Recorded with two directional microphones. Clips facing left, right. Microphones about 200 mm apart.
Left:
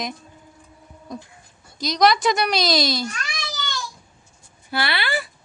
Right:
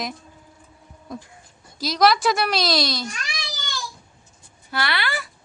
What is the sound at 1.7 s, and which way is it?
A woman's voice, 5° right (ahead or behind).